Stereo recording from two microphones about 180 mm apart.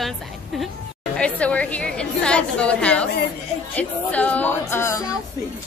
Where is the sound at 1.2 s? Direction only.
5° left (ahead or behind).